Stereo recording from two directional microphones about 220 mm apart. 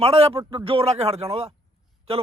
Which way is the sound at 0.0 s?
25° right (ahead or behind).